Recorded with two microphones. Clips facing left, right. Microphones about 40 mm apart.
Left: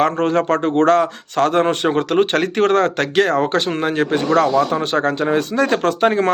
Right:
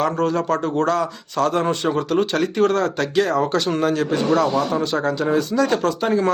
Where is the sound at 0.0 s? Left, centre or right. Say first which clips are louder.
Left 4 dB; left.